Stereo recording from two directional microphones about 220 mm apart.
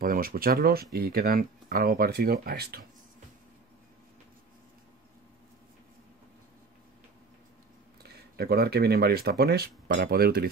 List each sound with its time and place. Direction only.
0.0 s speech: 40° right (ahead or behind)
8.0 s speech: 45° right (ahead or behind)